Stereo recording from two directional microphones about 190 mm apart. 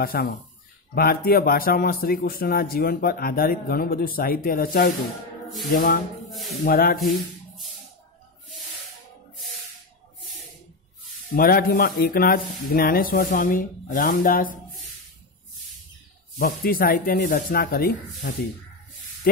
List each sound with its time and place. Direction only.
0.0 s speech: 50° left (ahead or behind)
11.3 s speech: 50° left (ahead or behind)
16.3 s speech: 50° left (ahead or behind)